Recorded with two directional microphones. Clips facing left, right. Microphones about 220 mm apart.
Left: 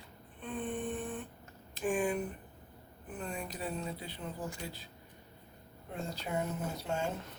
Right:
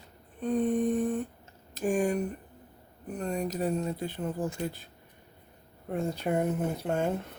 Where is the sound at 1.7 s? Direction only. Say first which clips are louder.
Right 5 dB; 40° right (ahead or behind).